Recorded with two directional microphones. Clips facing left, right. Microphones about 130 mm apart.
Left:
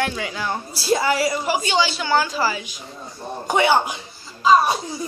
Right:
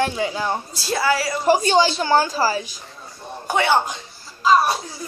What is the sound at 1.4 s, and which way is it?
A woman's voice, 40° right (ahead or behind).